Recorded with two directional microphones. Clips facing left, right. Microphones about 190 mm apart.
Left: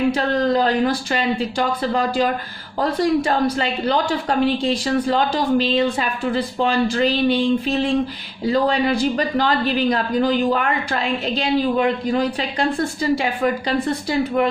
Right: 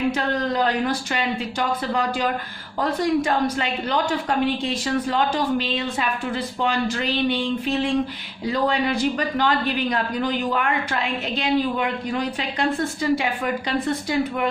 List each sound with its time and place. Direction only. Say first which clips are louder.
0.1 s a woman's voice: left 5 dB; 35° left (ahead or behind)